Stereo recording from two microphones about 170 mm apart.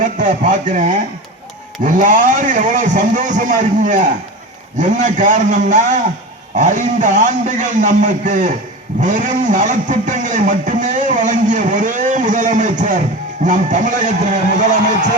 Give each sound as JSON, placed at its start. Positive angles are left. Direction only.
{"t": 0.0, "sound": "speech", "side_deg": -45}